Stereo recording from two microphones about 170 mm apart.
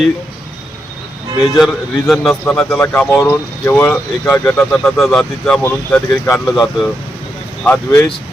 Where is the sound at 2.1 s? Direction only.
Centre (ahead or behind).